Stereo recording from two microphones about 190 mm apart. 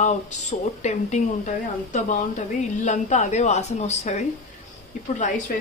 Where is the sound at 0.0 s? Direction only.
35° left (ahead or behind).